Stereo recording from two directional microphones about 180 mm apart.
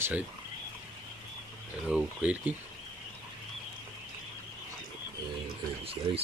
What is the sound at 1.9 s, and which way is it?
Speech, 5° right (ahead or behind).